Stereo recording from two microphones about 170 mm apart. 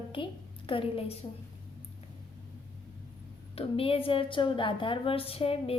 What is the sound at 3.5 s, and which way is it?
A woman's voice, 35° left (ahead or behind).